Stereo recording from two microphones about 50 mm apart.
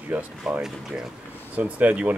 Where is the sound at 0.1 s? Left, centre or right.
Right.